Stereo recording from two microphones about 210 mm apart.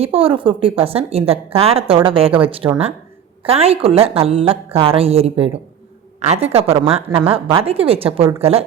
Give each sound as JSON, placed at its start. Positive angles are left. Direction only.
{"t": 0.0, "sound": "a woman's voice", "side_deg": -25}